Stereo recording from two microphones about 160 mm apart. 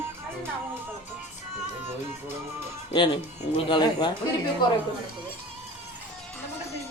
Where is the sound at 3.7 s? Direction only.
25° left (ahead or behind).